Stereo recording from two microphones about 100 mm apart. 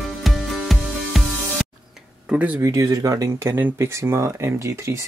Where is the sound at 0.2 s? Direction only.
Centre (ahead or behind).